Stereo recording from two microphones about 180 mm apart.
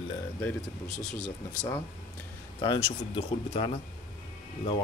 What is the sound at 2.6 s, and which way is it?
Speech, 25° left (ahead or behind).